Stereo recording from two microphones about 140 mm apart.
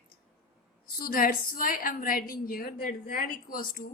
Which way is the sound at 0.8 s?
90° left.